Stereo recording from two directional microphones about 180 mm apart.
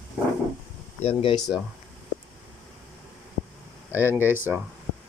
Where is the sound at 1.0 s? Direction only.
30° left (ahead or behind).